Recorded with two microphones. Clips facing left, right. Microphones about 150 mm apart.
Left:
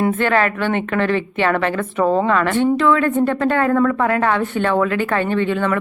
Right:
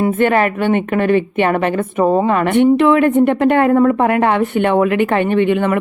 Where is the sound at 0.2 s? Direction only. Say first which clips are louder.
Right 4 dB; 20° right (ahead or behind).